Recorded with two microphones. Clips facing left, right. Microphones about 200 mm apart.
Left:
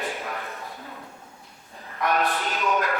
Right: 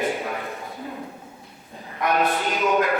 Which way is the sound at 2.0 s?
20° right (ahead or behind).